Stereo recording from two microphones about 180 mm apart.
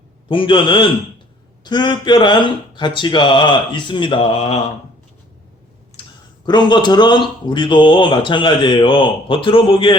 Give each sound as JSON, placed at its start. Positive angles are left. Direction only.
{"t": 0.3, "sound": "speech", "side_deg": 30}
{"t": 6.0, "sound": "a sound", "side_deg": 30}
{"t": 6.4, "sound": "speech", "side_deg": 25}